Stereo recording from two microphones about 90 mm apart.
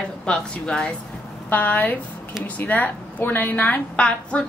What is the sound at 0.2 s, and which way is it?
A woman's voice, 10° left (ahead or behind).